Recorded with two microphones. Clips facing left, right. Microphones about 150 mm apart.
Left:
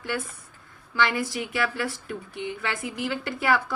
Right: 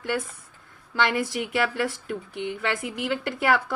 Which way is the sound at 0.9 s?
70° right (ahead or behind).